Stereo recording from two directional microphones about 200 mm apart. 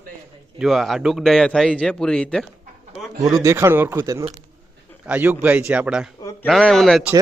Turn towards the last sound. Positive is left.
turn(degrees=0)  # may be behind; listen again after turning